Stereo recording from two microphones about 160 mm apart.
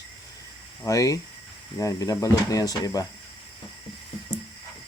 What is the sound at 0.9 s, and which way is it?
Speech, 20° left (ahead or behind).